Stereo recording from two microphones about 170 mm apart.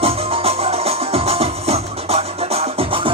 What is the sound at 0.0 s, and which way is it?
Music, 35° right (ahead or behind).